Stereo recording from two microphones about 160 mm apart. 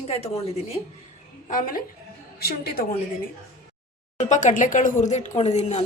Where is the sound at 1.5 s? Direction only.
60° left (ahead or behind).